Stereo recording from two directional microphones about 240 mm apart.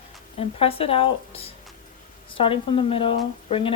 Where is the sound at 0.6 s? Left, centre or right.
Left.